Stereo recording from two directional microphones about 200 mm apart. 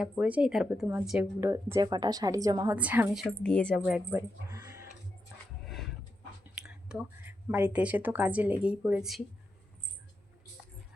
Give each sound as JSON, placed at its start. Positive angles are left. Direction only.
{"t": 0.0, "sound": "a woman's voice", "side_deg": -5}
{"t": 2.7, "sound": "a woman's voice", "side_deg": -10}
{"t": 4.5, "sound": "a sound", "side_deg": -15}
{"t": 6.6, "sound": "a woman's voice", "side_deg": -5}